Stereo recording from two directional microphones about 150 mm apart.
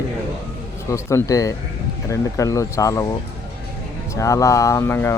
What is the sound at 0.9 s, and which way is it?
Speech, 20° left (ahead or behind).